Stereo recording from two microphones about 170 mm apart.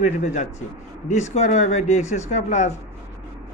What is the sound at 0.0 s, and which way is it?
A woman's voice, 45° left (ahead or behind).